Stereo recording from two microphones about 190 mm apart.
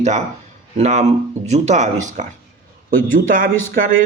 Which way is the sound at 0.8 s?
35° right (ahead or behind).